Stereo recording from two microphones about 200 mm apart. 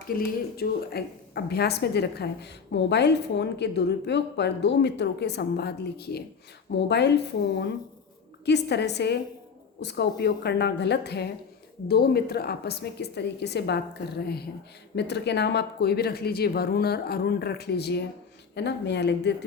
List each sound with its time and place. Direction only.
0.2 s a woman's voice: 50° left (ahead or behind)